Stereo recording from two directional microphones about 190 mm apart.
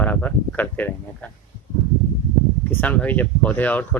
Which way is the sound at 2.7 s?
10° left (ahead or behind).